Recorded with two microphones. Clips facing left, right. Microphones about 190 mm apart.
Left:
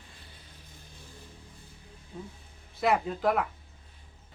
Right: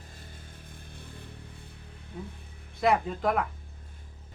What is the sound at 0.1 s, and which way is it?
Vehicle, 45° right (ahead or behind).